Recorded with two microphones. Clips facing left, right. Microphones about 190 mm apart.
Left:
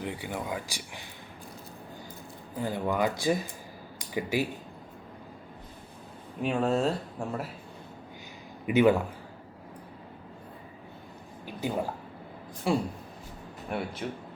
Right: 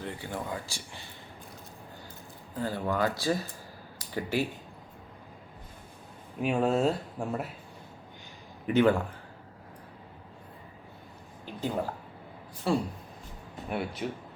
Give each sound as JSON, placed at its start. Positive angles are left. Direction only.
{"t": 0.0, "sound": "speech", "side_deg": 15}
{"t": 2.6, "sound": "speech", "side_deg": 15}
{"t": 6.4, "sound": "speech", "side_deg": -5}
{"t": 8.6, "sound": "speech", "side_deg": 10}
{"t": 11.4, "sound": "a sound", "side_deg": 10}
{"t": 12.7, "sound": "speech", "side_deg": 15}
{"t": 13.7, "sound": "speech", "side_deg": 0}